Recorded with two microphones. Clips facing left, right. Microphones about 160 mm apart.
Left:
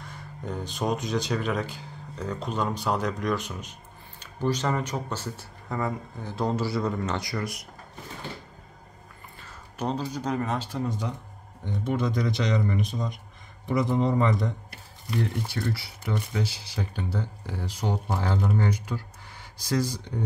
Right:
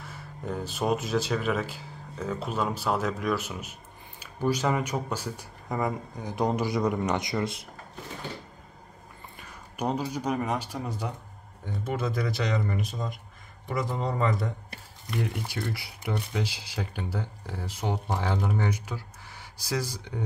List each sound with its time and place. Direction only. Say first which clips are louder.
0.0 s speech: even; 5° right (ahead or behind); by 7.6 s 25° right (ahead or behind)
9.4 s speech: even; 15° right (ahead or behind)
15.1 s speech: left 2 dB; 15° right (ahead or behind)